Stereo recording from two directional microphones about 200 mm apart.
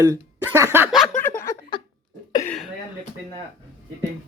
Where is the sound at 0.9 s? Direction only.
5° left (ahead or behind).